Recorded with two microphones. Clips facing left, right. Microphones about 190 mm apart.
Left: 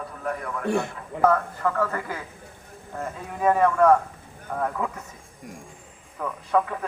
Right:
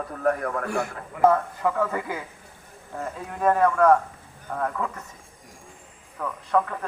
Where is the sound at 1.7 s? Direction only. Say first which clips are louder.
Right 1 dB; 10° right (ahead or behind).